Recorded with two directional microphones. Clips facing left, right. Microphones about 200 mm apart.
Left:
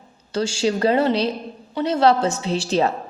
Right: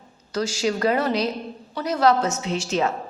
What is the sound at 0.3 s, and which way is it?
A woman's voice, 30° left (ahead or behind).